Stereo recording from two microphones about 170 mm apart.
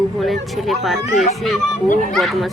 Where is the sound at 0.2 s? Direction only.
Centre (ahead or behind).